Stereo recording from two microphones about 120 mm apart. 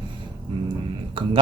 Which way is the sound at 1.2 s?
45° right (ahead or behind).